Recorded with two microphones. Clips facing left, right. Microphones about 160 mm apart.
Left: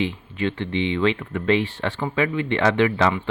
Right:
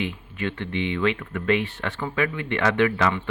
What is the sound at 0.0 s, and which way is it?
Speech, 30° left (ahead or behind).